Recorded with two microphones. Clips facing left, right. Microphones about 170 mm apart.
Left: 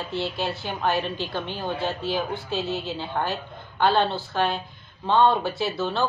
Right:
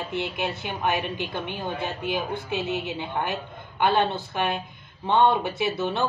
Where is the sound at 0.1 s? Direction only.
20° right (ahead or behind).